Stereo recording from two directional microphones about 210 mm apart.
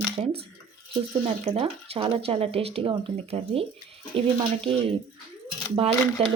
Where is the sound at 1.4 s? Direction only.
25° right (ahead or behind).